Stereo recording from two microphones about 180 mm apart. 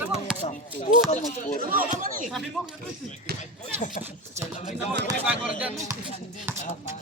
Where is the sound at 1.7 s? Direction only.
45° right (ahead or behind).